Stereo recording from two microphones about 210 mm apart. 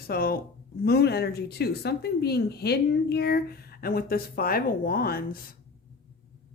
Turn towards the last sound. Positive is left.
turn(degrees=45)  # may be behind; listen again after turning